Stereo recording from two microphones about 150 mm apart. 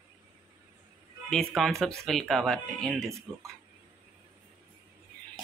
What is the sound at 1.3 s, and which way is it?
Speech, centre (ahead or behind).